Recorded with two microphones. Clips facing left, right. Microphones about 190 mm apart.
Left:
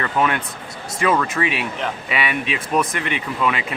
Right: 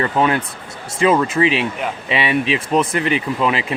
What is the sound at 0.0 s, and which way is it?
Speech, 25° right (ahead or behind).